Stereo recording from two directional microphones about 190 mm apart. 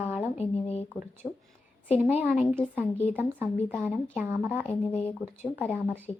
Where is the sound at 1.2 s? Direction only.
10° right (ahead or behind).